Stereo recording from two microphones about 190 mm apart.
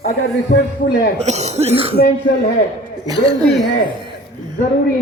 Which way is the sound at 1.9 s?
55° left (ahead or behind).